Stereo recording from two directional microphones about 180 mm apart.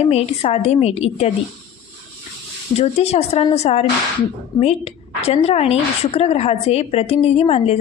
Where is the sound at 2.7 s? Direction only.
35° left (ahead or behind).